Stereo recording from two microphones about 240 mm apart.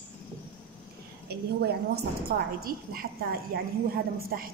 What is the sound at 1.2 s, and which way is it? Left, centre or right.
A woman's voice, right.